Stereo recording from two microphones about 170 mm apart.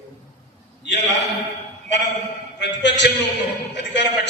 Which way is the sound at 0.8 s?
90° left.